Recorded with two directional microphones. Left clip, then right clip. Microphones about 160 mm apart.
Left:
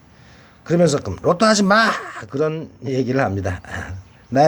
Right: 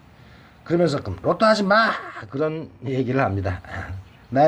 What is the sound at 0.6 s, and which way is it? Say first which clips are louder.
Speech: left 4 dB; 40° left (ahead or behind).